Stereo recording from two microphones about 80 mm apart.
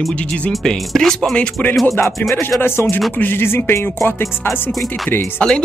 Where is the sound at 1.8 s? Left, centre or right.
Left.